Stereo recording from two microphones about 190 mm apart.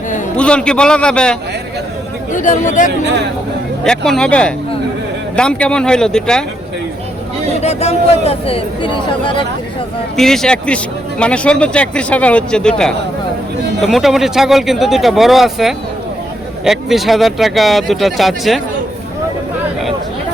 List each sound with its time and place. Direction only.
0.3 s speech: 5° left (ahead or behind)
2.3 s speech: 40° left (ahead or behind)
3.8 s speech: 5° left (ahead or behind)
7.6 s speech: 35° left (ahead or behind)
10.2 s speech: centre (ahead or behind)